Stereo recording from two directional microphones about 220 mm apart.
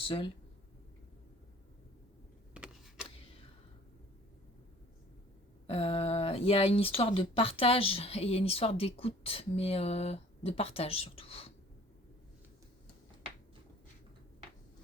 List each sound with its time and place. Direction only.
0.0 s speech: 20° left (ahead or behind)
2.5 s a sound: 5° right (ahead or behind)
5.6 s speech: 25° left (ahead or behind)